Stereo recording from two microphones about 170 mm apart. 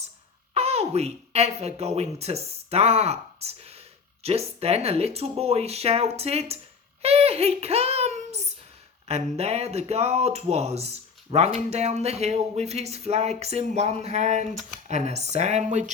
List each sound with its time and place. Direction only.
0.5 s a woman's voice: 35° right (ahead or behind)